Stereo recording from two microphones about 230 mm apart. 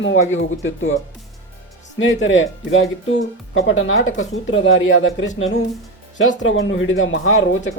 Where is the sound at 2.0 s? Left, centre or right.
Left.